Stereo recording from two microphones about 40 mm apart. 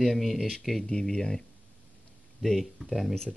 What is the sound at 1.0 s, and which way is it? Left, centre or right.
Speech, centre.